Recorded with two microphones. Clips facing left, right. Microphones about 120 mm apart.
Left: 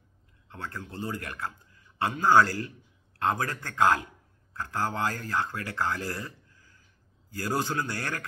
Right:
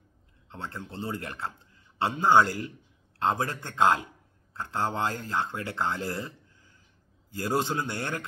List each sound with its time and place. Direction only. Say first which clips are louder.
0.5 s a man's voice: even; 25° right (ahead or behind)